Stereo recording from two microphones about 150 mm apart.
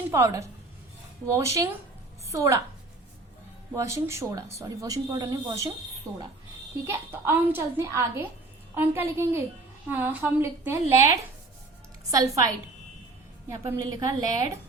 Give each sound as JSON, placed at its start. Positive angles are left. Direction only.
{"t": 0.1, "sound": "a woman's voice", "side_deg": -20}
{"t": 3.8, "sound": "speech", "side_deg": -20}
{"t": 6.8, "sound": "a woman's voice", "side_deg": -15}
{"t": 13.7, "sound": "speech", "side_deg": -20}